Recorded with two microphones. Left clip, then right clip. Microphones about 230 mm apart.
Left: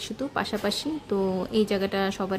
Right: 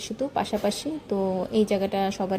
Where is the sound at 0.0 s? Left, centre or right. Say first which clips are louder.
Right 2 dB; centre.